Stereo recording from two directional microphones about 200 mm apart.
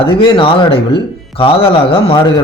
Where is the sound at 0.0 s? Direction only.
25° left (ahead or behind).